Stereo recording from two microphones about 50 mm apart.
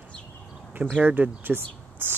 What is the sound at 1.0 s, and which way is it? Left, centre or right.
Speech, right.